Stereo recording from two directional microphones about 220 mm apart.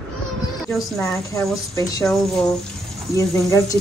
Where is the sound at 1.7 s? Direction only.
15° left (ahead or behind).